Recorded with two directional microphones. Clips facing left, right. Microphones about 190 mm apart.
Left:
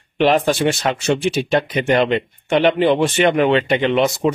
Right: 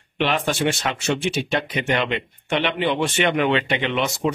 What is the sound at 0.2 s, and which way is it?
Speech, 40° left (ahead or behind).